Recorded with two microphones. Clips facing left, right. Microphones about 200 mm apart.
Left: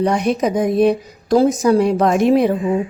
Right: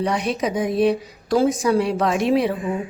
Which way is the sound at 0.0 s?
45° left (ahead or behind).